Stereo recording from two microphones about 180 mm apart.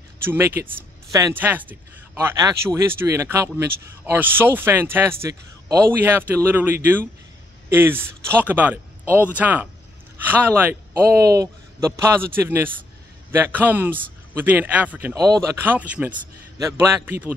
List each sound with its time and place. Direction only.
0.2 s speech: 10° right (ahead or behind)
15.2 s speech: 20° right (ahead or behind)
15.6 s speech: 10° right (ahead or behind)